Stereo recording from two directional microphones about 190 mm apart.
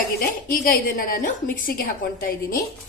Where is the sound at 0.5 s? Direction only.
50° left (ahead or behind).